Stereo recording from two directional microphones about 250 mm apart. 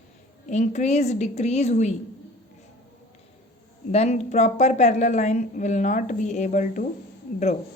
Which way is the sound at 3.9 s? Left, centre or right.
Left.